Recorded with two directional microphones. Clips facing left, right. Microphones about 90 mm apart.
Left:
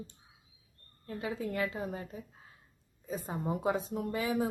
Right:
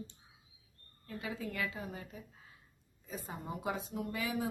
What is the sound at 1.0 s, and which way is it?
Speech, 40° left (ahead or behind).